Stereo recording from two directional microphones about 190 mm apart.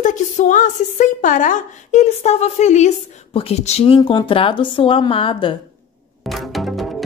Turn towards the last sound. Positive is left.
turn(degrees=0)  # may be behind; listen again after turning